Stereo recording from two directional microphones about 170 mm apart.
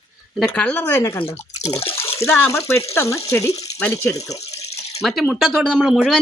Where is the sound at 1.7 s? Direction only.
35° left (ahead or behind).